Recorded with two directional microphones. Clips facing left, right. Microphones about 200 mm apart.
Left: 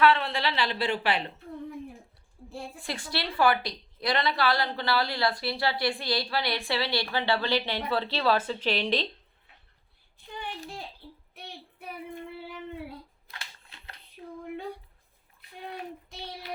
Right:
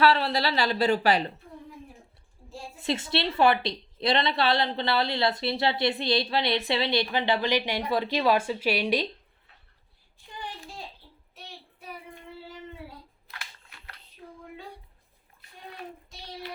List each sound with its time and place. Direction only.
0.0 s speech: 35° right (ahead or behind)
2.7 s a woman's voice: 25° right (ahead or behind)
13.3 s a sound: 25° left (ahead or behind)